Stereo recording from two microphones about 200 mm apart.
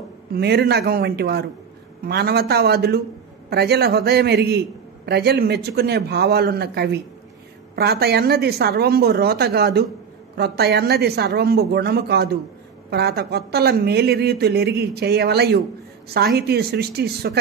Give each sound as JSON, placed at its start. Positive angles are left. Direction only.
{"t": 0.3, "sound": "a man's voice", "side_deg": -55}